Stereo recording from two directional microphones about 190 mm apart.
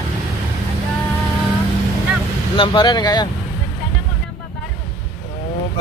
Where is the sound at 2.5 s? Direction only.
25° left (ahead or behind).